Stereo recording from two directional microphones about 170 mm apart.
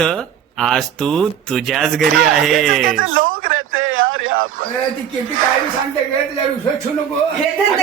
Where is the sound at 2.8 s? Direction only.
55° right (ahead or behind).